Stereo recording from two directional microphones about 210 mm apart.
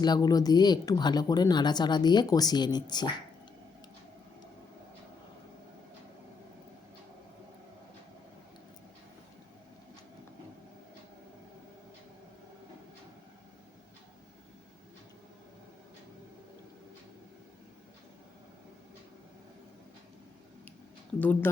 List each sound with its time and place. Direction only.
0.0 s speech: 20° left (ahead or behind)
21.2 s speech: 10° left (ahead or behind)